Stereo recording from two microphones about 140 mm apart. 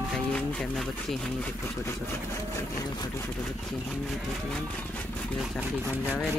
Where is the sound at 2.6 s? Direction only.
20° left (ahead or behind).